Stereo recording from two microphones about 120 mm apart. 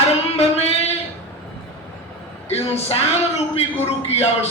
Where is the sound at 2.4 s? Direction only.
60° left (ahead or behind).